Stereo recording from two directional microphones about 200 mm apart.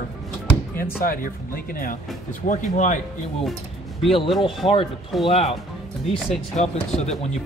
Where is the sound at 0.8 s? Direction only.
45° left (ahead or behind).